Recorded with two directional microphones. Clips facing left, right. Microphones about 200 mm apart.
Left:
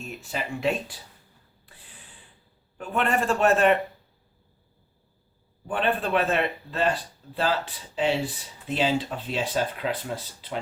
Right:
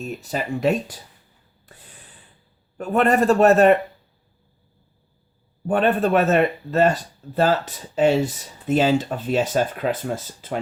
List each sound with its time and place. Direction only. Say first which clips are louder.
0.0 s a man's voice: right 6 dB; 40° right (ahead or behind)
1.6 s snort: right 7 dB; 45° right (ahead or behind)
2.7 s a man's voice: right 7 dB; 40° right (ahead or behind)
5.6 s speech: right 7 dB; 45° right (ahead or behind)